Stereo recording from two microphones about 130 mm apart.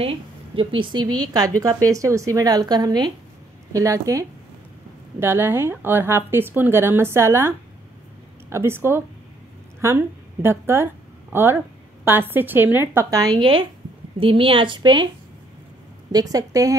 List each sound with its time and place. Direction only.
0.0 s a woman's voice: 45° right (ahead or behind)
16.1 s speech: 30° right (ahead or behind)